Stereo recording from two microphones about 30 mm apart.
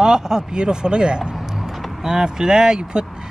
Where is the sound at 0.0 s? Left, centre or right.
Right.